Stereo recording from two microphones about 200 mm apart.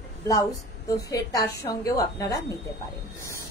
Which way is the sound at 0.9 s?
15° left (ahead or behind).